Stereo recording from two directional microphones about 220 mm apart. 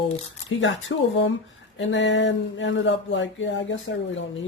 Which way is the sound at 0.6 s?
60° left (ahead or behind).